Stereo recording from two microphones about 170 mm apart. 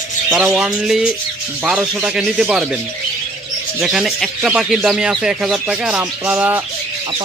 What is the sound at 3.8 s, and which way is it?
Speech, centre (ahead or behind).